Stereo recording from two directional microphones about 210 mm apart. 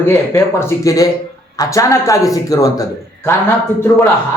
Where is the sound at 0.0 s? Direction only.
10° left (ahead or behind).